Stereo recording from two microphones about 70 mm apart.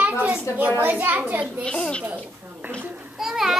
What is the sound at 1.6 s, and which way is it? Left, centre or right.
Speech, centre.